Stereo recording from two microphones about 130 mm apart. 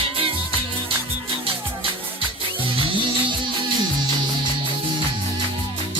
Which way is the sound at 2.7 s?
40° right (ahead or behind).